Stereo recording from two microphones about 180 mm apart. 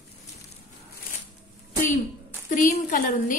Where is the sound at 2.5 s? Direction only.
45° left (ahead or behind).